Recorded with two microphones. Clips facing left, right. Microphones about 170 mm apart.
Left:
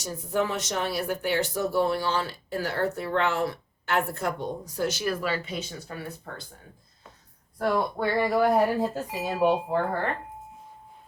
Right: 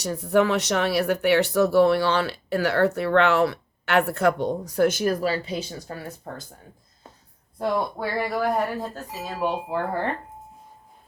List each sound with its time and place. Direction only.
0.0 s speech: 65° right (ahead or behind); by 6.4 s 40° right (ahead or behind)
7.6 s speech: 10° right (ahead or behind)
9.0 s speech: 15° left (ahead or behind)